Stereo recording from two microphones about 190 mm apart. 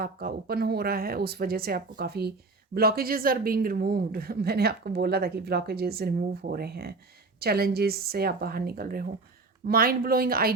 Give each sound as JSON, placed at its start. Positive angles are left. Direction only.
{"t": 0.0, "sound": "speech", "side_deg": -50}